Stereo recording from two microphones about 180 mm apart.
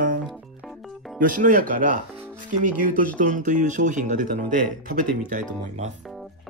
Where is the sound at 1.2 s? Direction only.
50° right (ahead or behind).